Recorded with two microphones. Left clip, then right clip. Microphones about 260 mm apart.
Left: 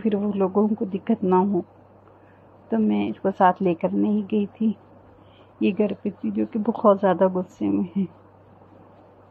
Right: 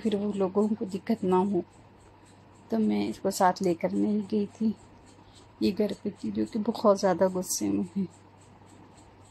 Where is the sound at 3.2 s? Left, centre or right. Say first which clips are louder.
Left 6 dB; centre.